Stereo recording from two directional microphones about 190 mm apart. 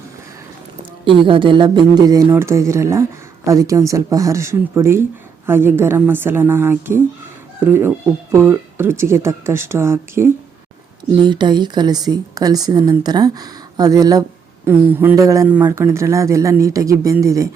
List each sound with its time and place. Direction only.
0.8 s speech: 25° right (ahead or behind)
11.1 s speech: 25° right (ahead or behind)